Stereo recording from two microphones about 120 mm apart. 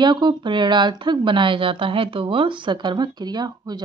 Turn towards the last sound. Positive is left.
turn(degrees=-35)  # may be behind; listen again after turning